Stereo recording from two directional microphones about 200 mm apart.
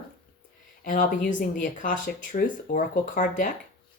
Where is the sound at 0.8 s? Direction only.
40° left (ahead or behind).